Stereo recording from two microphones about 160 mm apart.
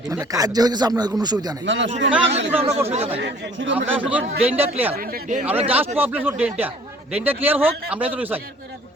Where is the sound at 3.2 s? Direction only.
90° right.